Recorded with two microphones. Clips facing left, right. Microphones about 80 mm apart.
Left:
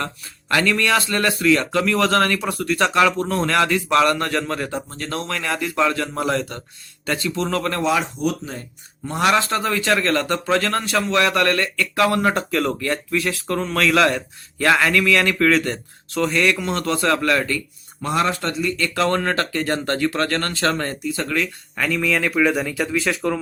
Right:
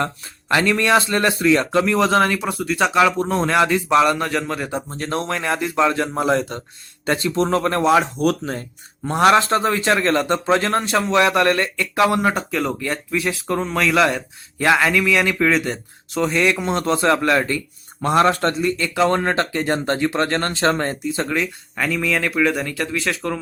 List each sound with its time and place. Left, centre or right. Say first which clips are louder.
0.0 s speech: right 4 dB; right; by 4.7 s centre
4.7 s speech: right 3 dB; right
9.0 s speech: right 4 dB; right
18.0 s a man's voice: right 5 dB; right
18.8 s speech: right 1 dB; centre
21.8 s speech: even; centre